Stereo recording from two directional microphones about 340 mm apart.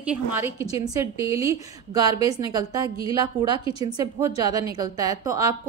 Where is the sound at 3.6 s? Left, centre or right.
Centre.